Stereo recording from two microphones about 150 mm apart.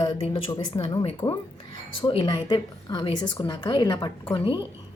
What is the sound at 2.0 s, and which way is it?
A woman's voice, 35° left (ahead or behind).